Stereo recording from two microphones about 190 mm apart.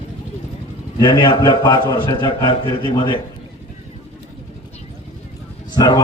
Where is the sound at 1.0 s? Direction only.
20° left (ahead or behind).